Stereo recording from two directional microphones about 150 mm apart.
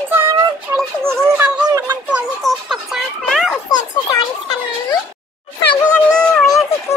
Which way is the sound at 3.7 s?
25° left (ahead or behind).